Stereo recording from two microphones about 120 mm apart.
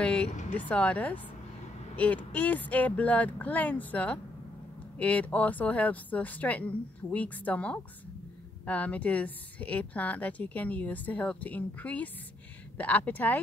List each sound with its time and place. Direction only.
0.0 s vehicle: 10° left (ahead or behind)
0.6 s a woman's voice: 10° left (ahead or behind)